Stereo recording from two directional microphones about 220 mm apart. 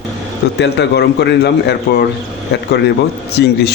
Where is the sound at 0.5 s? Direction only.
50° left (ahead or behind).